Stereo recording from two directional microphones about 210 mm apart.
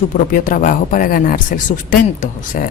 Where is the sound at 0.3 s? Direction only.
40° left (ahead or behind).